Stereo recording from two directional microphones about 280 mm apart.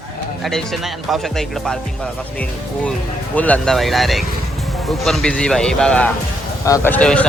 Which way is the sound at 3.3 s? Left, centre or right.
Centre.